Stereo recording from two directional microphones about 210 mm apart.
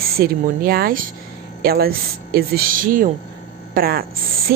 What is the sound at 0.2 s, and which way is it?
A woman's voice, 45° right (ahead or behind).